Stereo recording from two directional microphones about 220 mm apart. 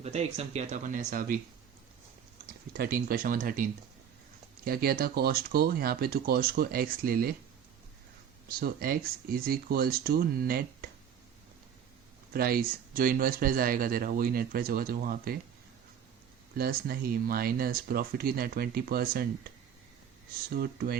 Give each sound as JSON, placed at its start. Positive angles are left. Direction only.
{"t": 0.0, "sound": "speech", "side_deg": -30}
{"t": 2.7, "sound": "speech", "side_deg": -45}
{"t": 8.4, "sound": "speech", "side_deg": -45}
{"t": 12.3, "sound": "speech", "side_deg": -45}
{"t": 16.6, "sound": "speech", "side_deg": -45}
{"t": 20.5, "sound": "speech", "side_deg": -45}